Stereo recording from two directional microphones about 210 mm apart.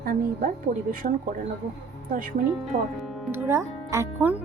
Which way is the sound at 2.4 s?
45° right (ahead or behind).